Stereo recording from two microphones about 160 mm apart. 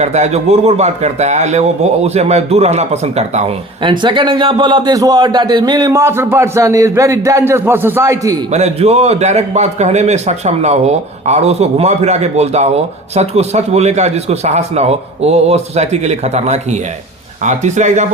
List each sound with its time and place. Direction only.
0.0 s a man's voice: 45° right (ahead or behind); by 8.4 s 20° right (ahead or behind)
8.5 s speech: 45° right (ahead or behind)